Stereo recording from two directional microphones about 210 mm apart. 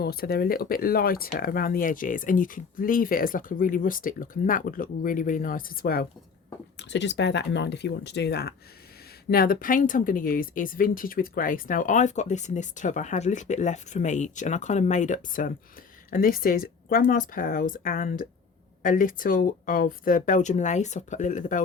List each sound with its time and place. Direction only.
0.0 s speech: 45° left (ahead or behind)
6.7 s speech: 55° left (ahead or behind); by 21.6 s 35° left (ahead or behind)